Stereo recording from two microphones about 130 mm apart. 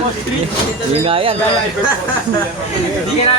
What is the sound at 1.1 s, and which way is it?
Speech, 45° right (ahead or behind).